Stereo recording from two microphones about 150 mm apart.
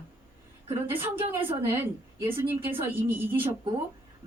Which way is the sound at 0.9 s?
15° right (ahead or behind).